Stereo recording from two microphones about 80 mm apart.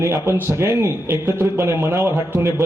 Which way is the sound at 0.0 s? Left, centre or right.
Right.